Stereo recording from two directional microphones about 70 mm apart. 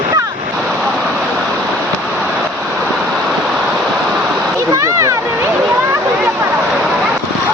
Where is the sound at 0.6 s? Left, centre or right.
Centre.